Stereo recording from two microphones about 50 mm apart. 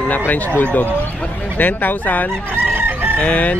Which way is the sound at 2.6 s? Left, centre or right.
Right.